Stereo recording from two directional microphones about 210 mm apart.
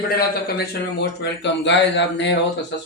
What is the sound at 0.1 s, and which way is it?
Speech, 45° left (ahead or behind).